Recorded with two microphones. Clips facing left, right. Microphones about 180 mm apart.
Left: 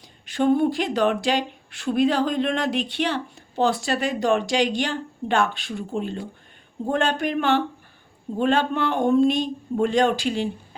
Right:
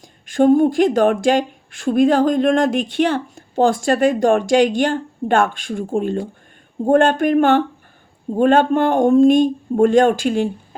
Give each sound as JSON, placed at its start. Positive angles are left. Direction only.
{"t": 0.0, "sound": "speech", "side_deg": -45}